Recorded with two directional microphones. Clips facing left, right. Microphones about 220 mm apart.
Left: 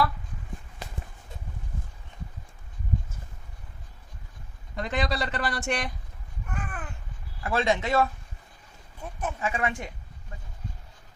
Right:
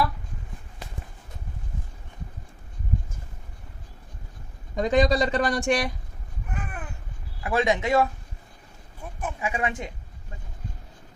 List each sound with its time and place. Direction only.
4.7 s speech: 15° right (ahead or behind)
6.5 s a sound: 5° right (ahead or behind)
7.4 s speech: 15° right (ahead or behind)
9.2 s speech: 15° right (ahead or behind)